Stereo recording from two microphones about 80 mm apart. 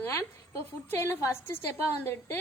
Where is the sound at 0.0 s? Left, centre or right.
Left.